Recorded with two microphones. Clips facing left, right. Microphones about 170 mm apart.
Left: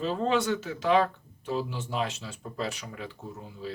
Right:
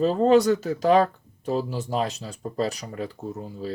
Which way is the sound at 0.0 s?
40° right (ahead or behind).